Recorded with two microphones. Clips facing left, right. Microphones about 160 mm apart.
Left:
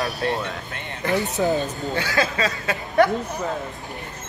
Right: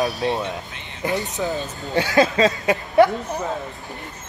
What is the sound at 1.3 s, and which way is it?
Speech, 20° left (ahead or behind).